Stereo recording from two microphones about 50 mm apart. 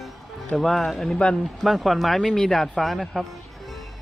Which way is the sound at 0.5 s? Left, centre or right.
Centre.